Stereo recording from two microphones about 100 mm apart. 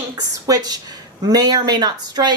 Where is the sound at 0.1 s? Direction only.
40° right (ahead or behind).